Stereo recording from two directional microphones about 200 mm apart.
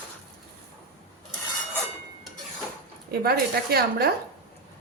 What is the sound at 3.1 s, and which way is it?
A woman's voice, 50° right (ahead or behind).